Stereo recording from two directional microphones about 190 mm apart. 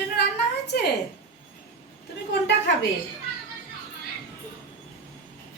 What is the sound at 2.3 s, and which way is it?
Speech, 65° left (ahead or behind).